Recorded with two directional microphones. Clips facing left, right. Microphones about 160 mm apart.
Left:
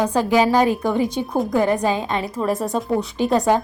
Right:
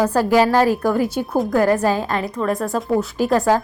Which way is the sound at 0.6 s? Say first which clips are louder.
Right 2 dB; centre (ahead or behind).